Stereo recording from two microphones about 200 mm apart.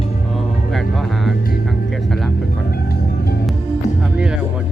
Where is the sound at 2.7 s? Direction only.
50° left (ahead or behind).